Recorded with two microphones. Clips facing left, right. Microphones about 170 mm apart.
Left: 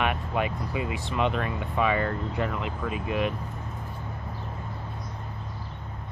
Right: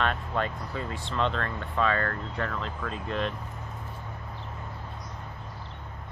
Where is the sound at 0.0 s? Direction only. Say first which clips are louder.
Left 2 dB; 15° left (ahead or behind).